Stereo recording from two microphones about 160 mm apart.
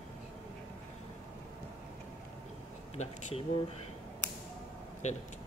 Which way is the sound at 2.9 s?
45° left (ahead or behind).